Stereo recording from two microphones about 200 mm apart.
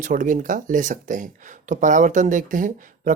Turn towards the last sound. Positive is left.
turn(degrees=-40)  # may be behind; listen again after turning